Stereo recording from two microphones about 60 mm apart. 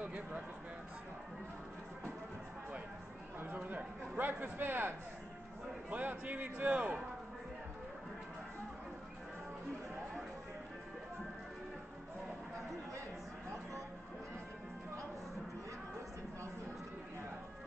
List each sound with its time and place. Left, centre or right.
3.6 s a man's voice: right